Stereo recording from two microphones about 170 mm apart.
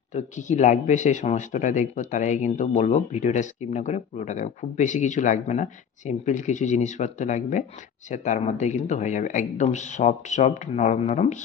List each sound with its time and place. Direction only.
0.1 s speech: 45° left (ahead or behind)